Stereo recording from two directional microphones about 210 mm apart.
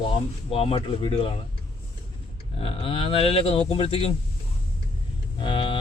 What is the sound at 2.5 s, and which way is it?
Speech, 25° left (ahead or behind).